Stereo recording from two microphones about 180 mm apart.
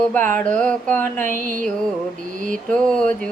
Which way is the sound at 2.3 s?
45° right (ahead or behind).